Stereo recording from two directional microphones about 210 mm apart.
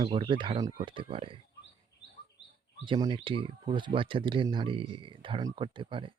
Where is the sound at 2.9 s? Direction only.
20° right (ahead or behind).